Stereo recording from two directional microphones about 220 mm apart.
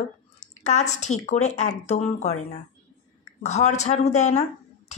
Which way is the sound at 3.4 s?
30° left (ahead or behind).